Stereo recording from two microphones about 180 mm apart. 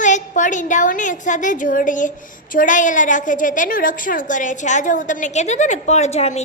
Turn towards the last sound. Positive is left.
turn(degrees=35)  # may be behind; listen again after turning